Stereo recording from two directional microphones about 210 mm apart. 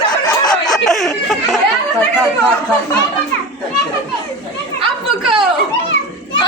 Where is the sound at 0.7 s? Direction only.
Centre (ahead or behind).